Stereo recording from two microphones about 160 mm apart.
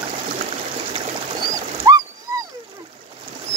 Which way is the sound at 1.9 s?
25° right (ahead or behind).